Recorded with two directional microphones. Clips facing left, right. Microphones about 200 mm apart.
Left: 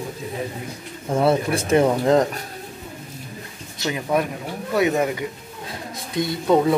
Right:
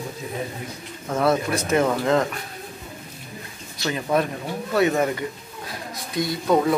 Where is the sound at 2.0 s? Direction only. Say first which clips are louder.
Left 3 dB; 35° left (ahead or behind).